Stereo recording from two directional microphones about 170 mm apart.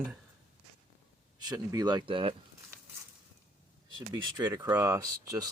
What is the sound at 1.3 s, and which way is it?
Speech, 20° right (ahead or behind).